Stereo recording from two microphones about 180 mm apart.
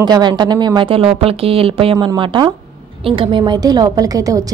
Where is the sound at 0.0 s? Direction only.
25° right (ahead or behind).